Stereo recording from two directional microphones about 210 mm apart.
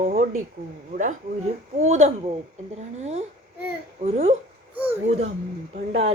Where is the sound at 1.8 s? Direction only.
35° right (ahead or behind).